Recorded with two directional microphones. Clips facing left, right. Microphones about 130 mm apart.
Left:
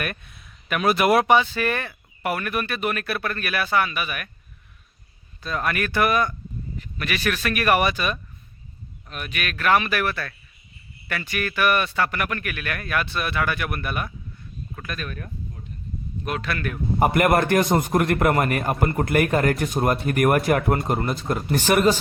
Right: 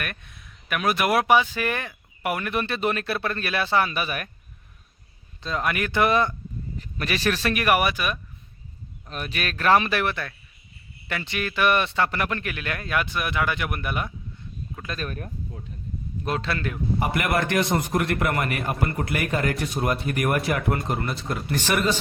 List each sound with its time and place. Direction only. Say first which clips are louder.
0.0 s speech: left 4 dB; 5° left (ahead or behind)
1.3 s speech: left 1 dB; 15° right (ahead or behind); by 4.3 s 35° right (ahead or behind)
5.4 s a man's voice: left 1 dB; 20° right (ahead or behind)
7.5 s speech: left 3 dB; 15° right (ahead or behind)
9.0 s speech: right 1 dB; 30° right (ahead or behind)
14.9 s speech: right 3 dB; 40° right (ahead or behind); by 16.8 s 25° right (ahead or behind)
17.0 s a man's voice: left 7 dB; 50° left (ahead or behind)